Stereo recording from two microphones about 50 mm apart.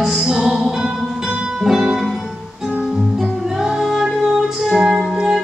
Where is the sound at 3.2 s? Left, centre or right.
Centre.